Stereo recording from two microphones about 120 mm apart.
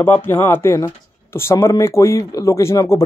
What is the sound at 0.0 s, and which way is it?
Speech, 15° left (ahead or behind).